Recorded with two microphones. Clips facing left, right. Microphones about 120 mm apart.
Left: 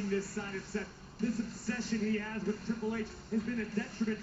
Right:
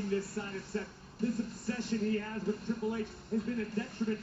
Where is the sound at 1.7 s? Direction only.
20° right (ahead or behind).